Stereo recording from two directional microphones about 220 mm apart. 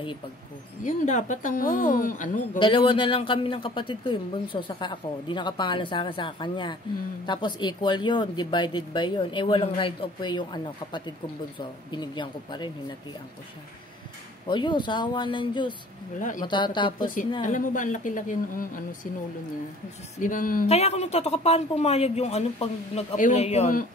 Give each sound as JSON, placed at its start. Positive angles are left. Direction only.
{"t": 0.8, "sound": "a woman's voice", "side_deg": 35}
{"t": 2.6, "sound": "speech", "side_deg": 25}
{"t": 14.5, "sound": "speech", "side_deg": 20}
{"t": 16.2, "sound": "a woman's voice", "side_deg": 35}
{"t": 16.4, "sound": "speech", "side_deg": 20}
{"t": 17.0, "sound": "a woman's voice", "side_deg": 35}
{"t": 20.2, "sound": "speech", "side_deg": 35}